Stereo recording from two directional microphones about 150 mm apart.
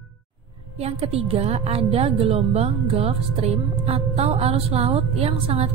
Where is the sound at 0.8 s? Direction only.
40° right (ahead or behind).